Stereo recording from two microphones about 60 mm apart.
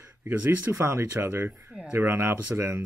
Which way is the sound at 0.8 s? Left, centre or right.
Right.